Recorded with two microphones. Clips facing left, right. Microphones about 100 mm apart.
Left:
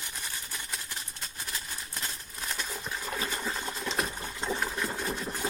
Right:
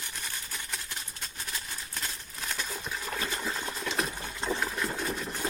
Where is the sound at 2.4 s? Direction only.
Centre (ahead or behind).